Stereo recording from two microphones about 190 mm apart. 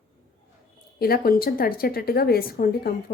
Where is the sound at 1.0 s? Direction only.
50° left (ahead or behind).